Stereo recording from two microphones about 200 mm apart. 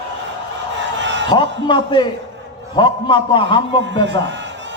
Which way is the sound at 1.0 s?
65° right (ahead or behind).